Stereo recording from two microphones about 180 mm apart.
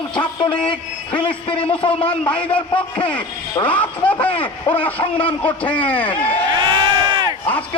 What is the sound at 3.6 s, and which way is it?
Speech, 10° left (ahead or behind).